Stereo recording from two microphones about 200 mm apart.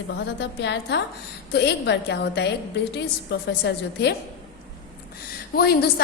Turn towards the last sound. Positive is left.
turn(degrees=50)  # may be behind; listen again after turning